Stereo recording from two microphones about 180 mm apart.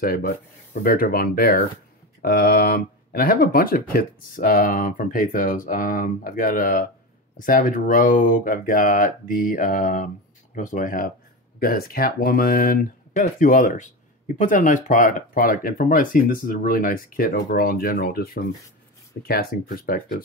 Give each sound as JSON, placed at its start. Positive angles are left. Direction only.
{"t": 0.8, "sound": "speech", "side_deg": 55}